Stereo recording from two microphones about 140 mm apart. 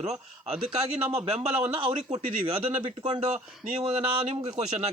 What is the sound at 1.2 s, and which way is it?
A man's voice, 40° right (ahead or behind).